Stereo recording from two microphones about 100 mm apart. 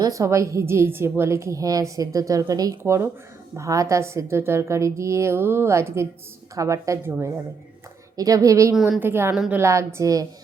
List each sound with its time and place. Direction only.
0.0 s a woman's voice: 35° right (ahead or behind)
8.1 s a woman's voice: 35° right (ahead or behind)
9.0 s a woman's voice: 20° right (ahead or behind)